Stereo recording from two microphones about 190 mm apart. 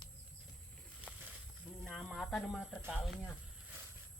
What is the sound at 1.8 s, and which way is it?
Speech, 5° left (ahead or behind).